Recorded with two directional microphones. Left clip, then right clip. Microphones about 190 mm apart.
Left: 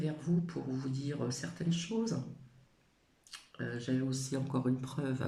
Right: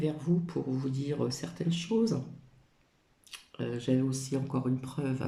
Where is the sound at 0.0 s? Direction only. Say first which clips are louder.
Right 5 dB; 20° right (ahead or behind).